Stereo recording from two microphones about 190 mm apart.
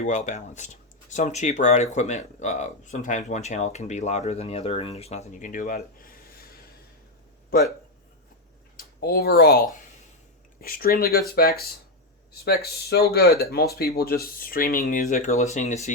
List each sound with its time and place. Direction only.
0.0 s speech: 40° left (ahead or behind)
7.5 s speech: 50° left (ahead or behind)
8.7 s speech: 50° left (ahead or behind)